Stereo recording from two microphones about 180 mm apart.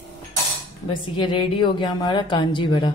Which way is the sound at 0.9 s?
25° left (ahead or behind).